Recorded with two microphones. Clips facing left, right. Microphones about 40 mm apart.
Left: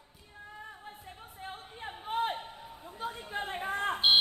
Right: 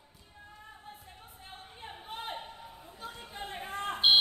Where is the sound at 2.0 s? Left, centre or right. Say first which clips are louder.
Left 10 dB; left.